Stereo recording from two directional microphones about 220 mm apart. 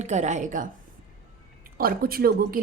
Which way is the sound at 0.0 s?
30° right (ahead or behind).